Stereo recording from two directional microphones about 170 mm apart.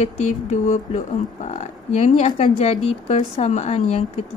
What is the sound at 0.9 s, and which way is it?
Speech, 45° left (ahead or behind).